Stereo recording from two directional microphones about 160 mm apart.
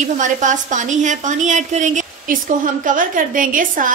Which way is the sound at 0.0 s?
50° right (ahead or behind).